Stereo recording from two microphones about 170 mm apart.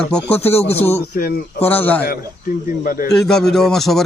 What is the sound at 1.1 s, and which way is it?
Speech, 65° left (ahead or behind).